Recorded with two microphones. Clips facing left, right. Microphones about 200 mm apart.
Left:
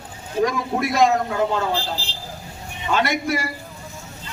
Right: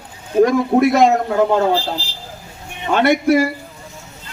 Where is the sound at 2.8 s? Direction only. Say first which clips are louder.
Right 7 dB; 60° right (ahead or behind).